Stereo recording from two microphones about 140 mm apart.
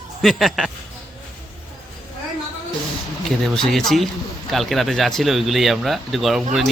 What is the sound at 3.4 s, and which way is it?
Speech, 5° left (ahead or behind).